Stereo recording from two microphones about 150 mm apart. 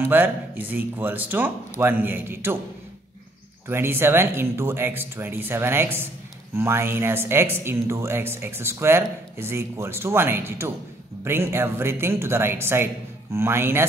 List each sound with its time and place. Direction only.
0.0 s speech: 15° right (ahead or behind)
3.6 s speech: 15° right (ahead or behind)